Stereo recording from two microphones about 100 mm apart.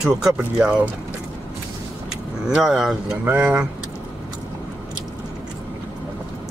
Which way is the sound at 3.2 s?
20° right (ahead or behind).